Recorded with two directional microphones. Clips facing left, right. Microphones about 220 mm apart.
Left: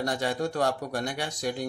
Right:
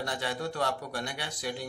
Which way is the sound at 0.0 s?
45° left (ahead or behind).